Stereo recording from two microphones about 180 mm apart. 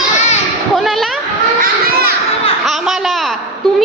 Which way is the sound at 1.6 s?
60° right (ahead or behind).